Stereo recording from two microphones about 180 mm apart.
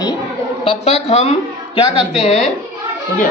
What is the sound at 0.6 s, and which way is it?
A man's voice, 35° left (ahead or behind).